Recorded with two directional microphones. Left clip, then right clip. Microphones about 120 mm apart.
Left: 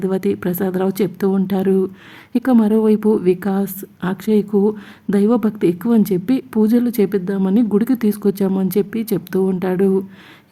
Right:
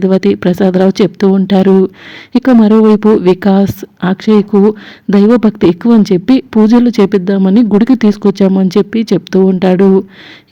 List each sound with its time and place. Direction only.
0.0 s a woman's voice: 30° right (ahead or behind)